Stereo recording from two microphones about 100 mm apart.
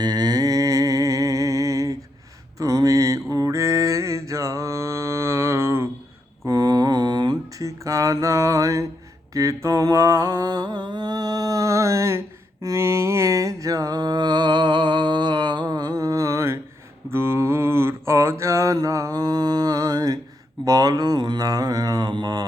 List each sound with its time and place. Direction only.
0.0 s music: 40° right (ahead or behind)
2.6 s mantra: 35° right (ahead or behind)
6.4 s mantra: 35° right (ahead or behind)
7.6 s mantra: 35° right (ahead or behind)